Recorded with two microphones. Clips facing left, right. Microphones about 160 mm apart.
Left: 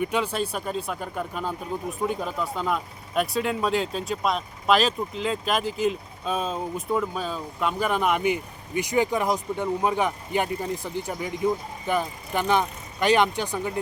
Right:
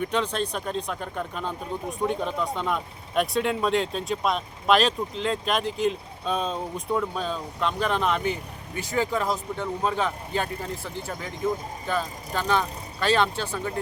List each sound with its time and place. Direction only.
0.0 s speech: 10° left (ahead or behind)